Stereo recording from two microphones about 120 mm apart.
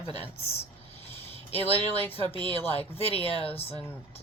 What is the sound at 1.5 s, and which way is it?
A woman's voice, 55° left (ahead or behind).